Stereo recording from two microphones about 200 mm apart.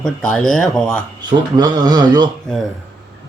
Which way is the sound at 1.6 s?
20° right (ahead or behind).